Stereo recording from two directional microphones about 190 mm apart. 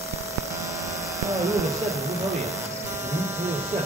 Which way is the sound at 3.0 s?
15° right (ahead or behind).